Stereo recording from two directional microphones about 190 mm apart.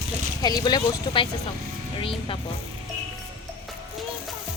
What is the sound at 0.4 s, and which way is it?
Speech, 20° left (ahead or behind).